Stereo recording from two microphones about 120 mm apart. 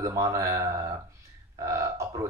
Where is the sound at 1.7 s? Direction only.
25° right (ahead or behind).